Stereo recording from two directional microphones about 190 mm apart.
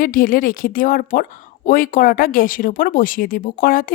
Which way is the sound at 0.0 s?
45° left (ahead or behind).